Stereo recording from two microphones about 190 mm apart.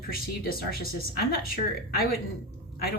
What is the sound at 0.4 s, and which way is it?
A man's voice, 50° left (ahead or behind).